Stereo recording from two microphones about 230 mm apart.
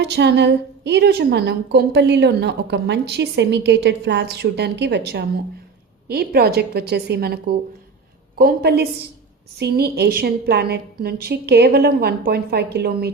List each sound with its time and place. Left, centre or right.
0.0 s a woman's voice: right